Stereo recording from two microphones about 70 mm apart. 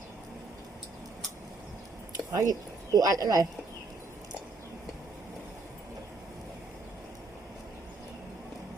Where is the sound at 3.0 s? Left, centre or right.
Right.